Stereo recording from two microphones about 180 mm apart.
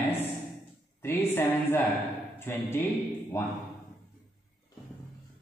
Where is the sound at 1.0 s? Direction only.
10° left (ahead or behind).